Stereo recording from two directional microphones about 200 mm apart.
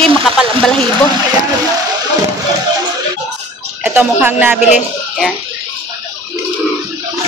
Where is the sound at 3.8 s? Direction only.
10° right (ahead or behind).